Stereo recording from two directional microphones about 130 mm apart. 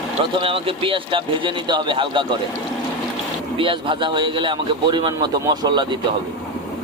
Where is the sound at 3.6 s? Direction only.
40° right (ahead or behind).